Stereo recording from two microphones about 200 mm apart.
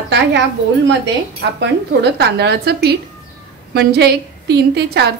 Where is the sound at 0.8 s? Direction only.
65° right (ahead or behind).